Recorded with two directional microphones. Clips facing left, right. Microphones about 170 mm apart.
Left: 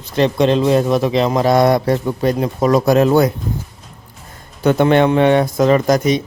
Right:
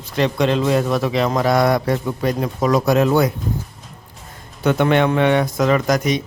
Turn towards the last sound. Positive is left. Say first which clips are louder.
# left 4 dB
turn(degrees=30)  # may be behind; listen again after turning